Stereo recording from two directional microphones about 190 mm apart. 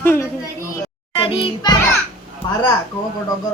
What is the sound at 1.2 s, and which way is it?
Music, 25° left (ahead or behind).